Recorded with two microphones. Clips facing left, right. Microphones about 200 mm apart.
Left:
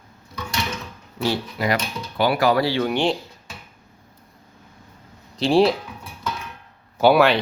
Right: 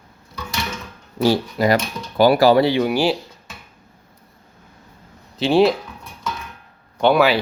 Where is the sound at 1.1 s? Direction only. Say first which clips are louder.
Right 6 dB; 40° right (ahead or behind); by 3.2 s 5° right (ahead or behind).